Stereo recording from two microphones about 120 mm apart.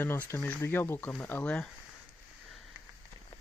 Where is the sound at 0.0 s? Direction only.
20° left (ahead or behind).